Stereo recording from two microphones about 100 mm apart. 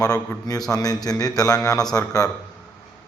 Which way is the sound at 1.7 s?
5° left (ahead or behind).